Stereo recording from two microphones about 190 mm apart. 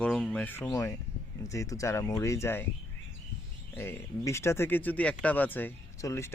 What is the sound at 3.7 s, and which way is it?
Speech, 10° left (ahead or behind).